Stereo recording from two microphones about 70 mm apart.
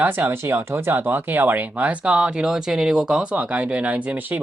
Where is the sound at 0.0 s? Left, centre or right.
Right.